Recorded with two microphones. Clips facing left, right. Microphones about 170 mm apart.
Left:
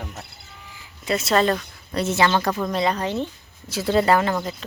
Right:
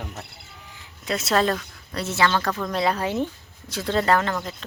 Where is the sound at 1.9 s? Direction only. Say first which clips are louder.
Left 3 dB; 20° left (ahead or behind).